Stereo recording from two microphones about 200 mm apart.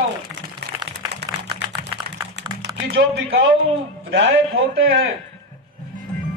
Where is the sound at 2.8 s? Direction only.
60° right (ahead or behind).